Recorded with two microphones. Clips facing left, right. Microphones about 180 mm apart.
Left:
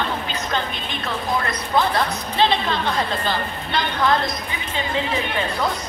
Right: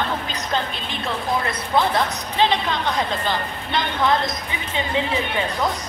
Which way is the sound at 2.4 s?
15° right (ahead or behind).